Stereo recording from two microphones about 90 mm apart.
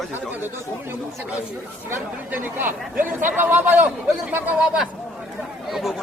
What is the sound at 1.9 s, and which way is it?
Speech, 20° right (ahead or behind).